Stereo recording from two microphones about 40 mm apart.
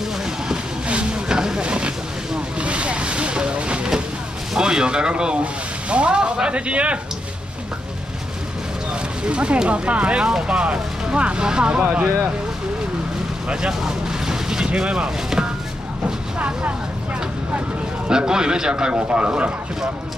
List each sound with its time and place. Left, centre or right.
0.5 s a sound: right
4.6 s speech: centre
9.2 s speech: right
10.2 s speech: centre
13.5 s speech: centre
16.3 s speech: right
18.1 s speech: centre
18.9 s speech: right